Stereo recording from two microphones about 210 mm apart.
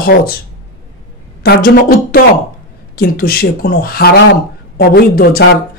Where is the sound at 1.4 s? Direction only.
45° left (ahead or behind).